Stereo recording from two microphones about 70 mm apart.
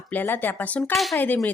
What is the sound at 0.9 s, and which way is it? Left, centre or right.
Speech, centre.